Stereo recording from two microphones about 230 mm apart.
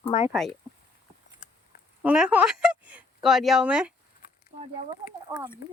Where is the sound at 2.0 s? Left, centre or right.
Centre.